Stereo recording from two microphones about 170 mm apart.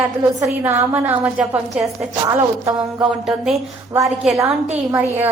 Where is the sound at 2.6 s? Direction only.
5° right (ahead or behind).